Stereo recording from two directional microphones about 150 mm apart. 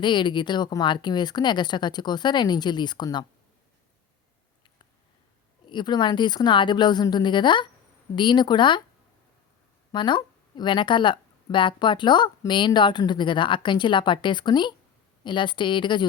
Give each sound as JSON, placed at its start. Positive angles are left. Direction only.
{"t": 0.0, "sound": "a woman's voice", "side_deg": 30}
{"t": 5.6, "sound": "speech", "side_deg": 30}
{"t": 9.9, "sound": "speech", "side_deg": 30}